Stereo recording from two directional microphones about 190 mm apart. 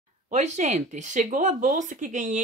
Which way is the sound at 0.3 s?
40° right (ahead or behind).